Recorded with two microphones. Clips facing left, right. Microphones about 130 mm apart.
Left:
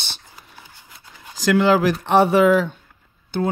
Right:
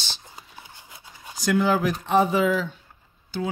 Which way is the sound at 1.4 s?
90° left.